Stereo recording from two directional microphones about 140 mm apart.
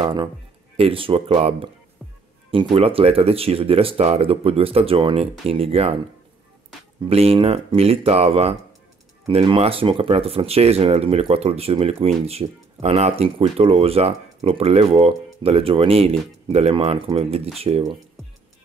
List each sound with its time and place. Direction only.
0.0 s speech: 35° right (ahead or behind)
7.0 s speech: 45° right (ahead or behind)